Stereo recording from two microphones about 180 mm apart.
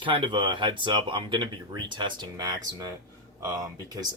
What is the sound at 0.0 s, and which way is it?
Speech, 25° right (ahead or behind).